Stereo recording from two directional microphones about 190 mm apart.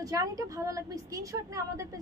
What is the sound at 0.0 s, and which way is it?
A woman's voice, 20° right (ahead or behind).